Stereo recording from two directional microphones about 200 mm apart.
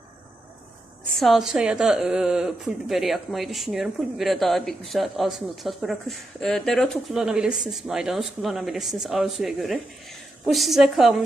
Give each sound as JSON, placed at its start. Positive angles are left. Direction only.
{"t": 1.1, "sound": "a woman's voice", "side_deg": 0}